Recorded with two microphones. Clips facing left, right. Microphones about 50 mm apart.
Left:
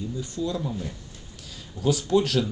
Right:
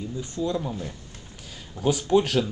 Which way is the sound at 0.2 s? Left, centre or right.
Right.